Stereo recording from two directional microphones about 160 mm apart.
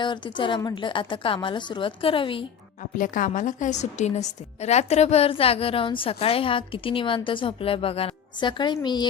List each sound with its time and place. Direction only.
0.0 s a woman's voice: 30° left (ahead or behind)
3.0 s a woman's voice: 55° left (ahead or behind); by 9.0 s 25° left (ahead or behind)